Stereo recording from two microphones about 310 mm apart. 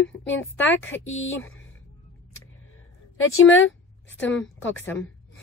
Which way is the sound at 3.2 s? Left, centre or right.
Left.